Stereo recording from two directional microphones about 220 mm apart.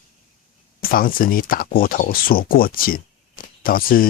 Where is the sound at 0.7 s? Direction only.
40° left (ahead or behind).